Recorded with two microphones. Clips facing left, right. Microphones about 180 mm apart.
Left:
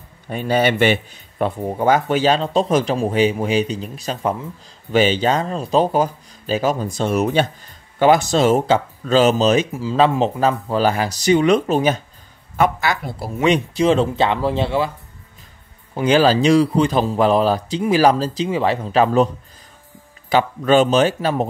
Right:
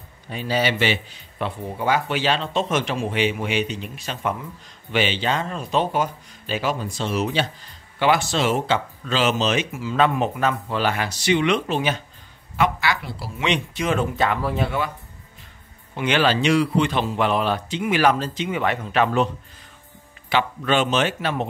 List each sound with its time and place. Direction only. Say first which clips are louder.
0.3 s speech: left 5 dB; 50° left (ahead or behind); by 14.9 s 30° left (ahead or behind)
15.9 s speech: left 6 dB; 35° left (ahead or behind)